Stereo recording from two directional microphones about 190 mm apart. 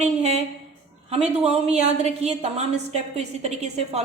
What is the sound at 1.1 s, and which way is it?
A woman's voice, 30° right (ahead or behind).